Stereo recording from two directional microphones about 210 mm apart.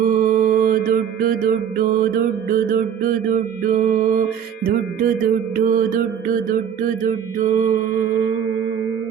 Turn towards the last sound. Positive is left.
turn(degrees=-40)  # may be behind; listen again after turning